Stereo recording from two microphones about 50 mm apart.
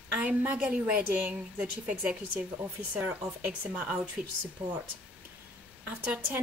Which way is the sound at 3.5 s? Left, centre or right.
Right.